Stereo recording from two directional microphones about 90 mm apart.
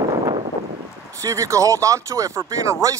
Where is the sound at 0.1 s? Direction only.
45° right (ahead or behind).